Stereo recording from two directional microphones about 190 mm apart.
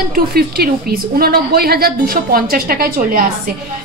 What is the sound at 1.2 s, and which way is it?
A woman's voice, 55° right (ahead or behind).